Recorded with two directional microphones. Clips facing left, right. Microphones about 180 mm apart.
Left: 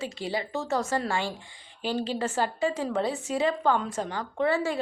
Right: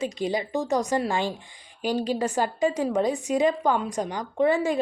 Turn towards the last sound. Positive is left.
turn(degrees=-15)  # may be behind; listen again after turning